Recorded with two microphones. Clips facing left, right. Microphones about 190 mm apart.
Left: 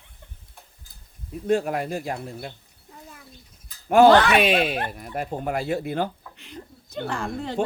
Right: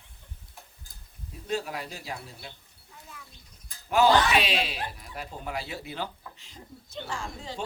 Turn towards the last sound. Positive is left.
turn(degrees=60)  # may be behind; listen again after turning